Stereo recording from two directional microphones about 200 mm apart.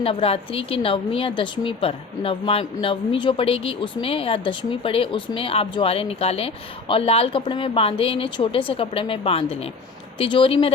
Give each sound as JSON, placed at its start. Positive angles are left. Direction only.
{"t": 0.0, "sound": "a woman's voice", "side_deg": 30}